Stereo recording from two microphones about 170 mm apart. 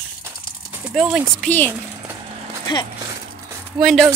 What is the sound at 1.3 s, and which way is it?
Speech, 5° left (ahead or behind).